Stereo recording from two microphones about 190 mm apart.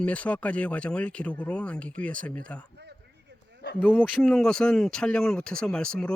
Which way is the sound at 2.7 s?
60° right (ahead or behind).